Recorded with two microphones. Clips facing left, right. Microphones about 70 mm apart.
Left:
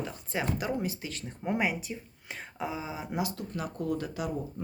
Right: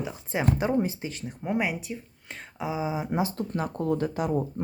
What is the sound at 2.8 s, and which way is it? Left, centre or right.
Speech, centre.